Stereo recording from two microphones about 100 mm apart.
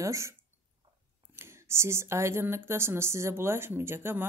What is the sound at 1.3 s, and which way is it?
Speech, 25° right (ahead or behind).